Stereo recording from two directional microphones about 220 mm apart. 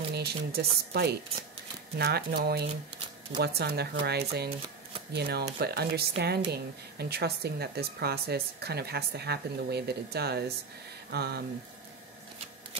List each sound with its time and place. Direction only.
0.1 s a woman's voice: 45° right (ahead or behind)